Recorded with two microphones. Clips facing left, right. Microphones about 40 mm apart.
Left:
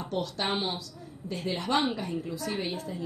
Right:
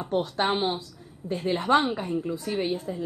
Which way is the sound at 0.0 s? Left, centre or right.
Right.